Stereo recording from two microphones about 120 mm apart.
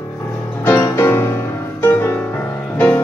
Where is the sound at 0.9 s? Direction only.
20° left (ahead or behind).